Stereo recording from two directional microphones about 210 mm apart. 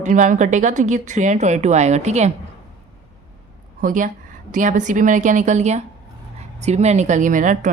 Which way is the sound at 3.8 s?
40° right (ahead or behind).